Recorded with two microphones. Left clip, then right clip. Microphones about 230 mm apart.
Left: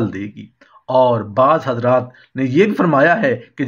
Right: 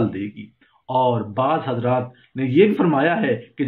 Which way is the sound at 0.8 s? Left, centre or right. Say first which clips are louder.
Left 6 dB; left.